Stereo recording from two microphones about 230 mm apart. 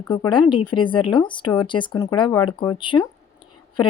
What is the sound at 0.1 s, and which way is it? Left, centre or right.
A woman's voice, centre.